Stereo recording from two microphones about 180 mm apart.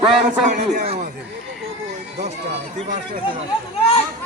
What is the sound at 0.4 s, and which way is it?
Speech, 45° right (ahead or behind).